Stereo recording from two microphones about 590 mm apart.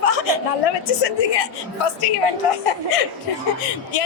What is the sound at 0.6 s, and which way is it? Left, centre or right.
A woman's voice, left.